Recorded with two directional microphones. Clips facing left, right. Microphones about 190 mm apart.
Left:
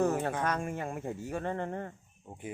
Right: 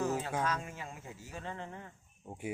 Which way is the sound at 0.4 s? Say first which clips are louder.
Left 5 dB; 60° left (ahead or behind).